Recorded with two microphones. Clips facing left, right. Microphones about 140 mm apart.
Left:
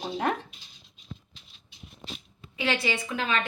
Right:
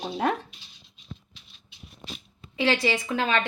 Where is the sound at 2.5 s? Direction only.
35° right (ahead or behind).